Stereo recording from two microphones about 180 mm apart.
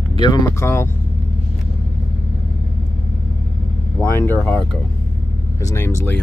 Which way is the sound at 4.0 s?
10° left (ahead or behind).